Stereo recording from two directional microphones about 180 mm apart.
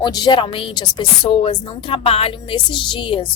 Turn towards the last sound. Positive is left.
turn(degrees=30)  # may be behind; listen again after turning